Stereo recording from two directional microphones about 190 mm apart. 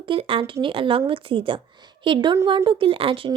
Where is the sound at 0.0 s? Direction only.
30° right (ahead or behind).